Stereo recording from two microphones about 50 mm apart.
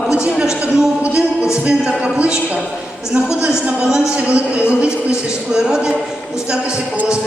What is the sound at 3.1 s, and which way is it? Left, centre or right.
Speech, right.